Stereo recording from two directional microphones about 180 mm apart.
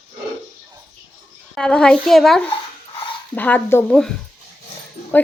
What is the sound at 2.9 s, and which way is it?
Dog, 30° left (ahead or behind).